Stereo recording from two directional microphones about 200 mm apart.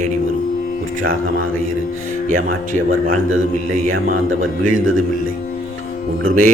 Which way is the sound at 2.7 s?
40° right (ahead or behind).